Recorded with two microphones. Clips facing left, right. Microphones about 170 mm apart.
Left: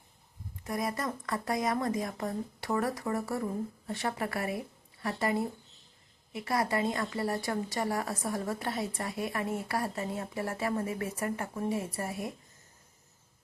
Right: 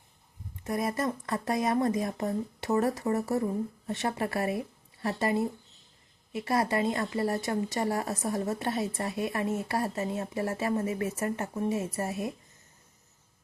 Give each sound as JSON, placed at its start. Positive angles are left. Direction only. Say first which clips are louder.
{"t": 0.6, "sound": "speech", "louder": "right 4 dB", "side_deg": -25}